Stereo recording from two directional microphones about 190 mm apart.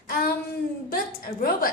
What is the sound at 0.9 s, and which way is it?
Speech, 55° left (ahead or behind).